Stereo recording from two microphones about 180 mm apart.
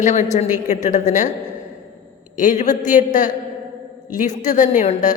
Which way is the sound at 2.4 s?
45° left (ahead or behind).